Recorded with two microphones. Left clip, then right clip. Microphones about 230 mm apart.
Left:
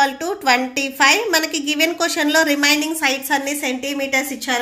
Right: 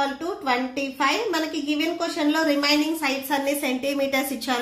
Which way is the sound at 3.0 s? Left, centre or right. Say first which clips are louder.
Left 5 dB; left.